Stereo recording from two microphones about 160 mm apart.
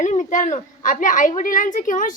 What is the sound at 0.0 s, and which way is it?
A woman's voice, 50° left (ahead or behind).